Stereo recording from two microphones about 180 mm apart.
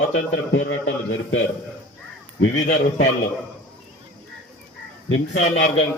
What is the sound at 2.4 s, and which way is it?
Speech, 90° left.